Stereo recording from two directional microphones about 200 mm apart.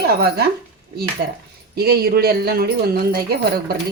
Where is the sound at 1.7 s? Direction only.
50° right (ahead or behind).